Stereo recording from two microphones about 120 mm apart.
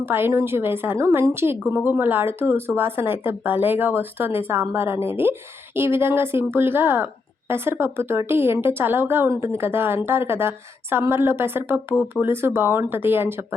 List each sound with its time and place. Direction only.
0.0 s speech: 20° right (ahead or behind)